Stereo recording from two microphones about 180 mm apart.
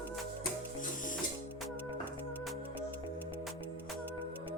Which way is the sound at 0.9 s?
45° left (ahead or behind).